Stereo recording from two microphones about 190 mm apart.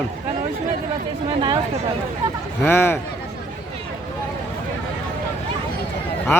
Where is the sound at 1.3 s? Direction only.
25° right (ahead or behind).